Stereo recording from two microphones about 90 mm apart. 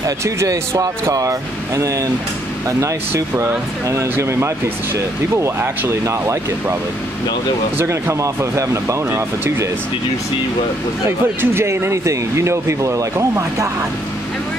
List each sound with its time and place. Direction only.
0.0 s speech: 35° right (ahead or behind)
3.9 s speech: 30° right (ahead or behind)
7.7 s speech: 30° right (ahead or behind)
11.1 s speech: 30° right (ahead or behind)